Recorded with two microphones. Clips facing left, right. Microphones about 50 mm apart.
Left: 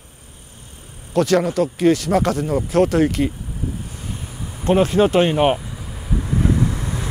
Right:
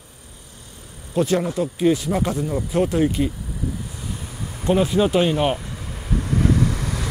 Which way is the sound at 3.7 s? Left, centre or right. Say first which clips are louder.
Even; left.